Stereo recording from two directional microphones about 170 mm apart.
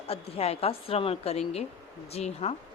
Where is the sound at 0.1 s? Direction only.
35° left (ahead or behind).